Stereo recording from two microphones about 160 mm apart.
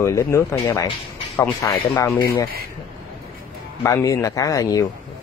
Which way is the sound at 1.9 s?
30° left (ahead or behind).